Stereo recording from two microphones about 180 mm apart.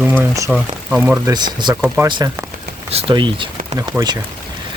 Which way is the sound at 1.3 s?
25° right (ahead or behind).